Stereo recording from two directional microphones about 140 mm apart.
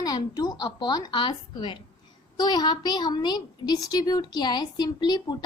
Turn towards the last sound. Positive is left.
turn(degrees=30)  # may be behind; listen again after turning